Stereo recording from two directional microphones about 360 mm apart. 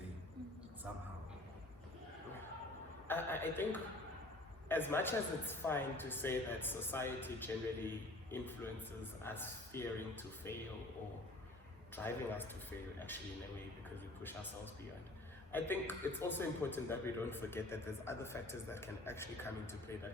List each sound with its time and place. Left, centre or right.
3.1 s a man's voice: centre
11.9 s a man's voice: centre
13.9 s a man's voice: centre